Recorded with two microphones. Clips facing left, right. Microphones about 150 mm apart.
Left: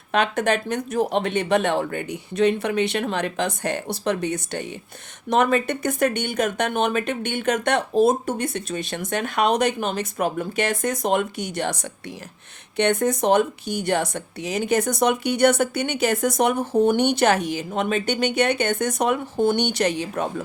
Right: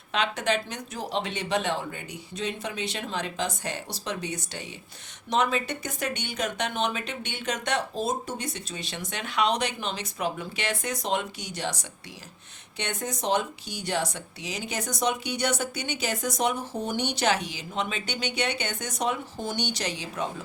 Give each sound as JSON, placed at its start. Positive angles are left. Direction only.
{"t": 0.1, "sound": "speech", "side_deg": 50}